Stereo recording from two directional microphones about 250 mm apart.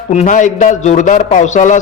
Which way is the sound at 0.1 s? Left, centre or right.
Left.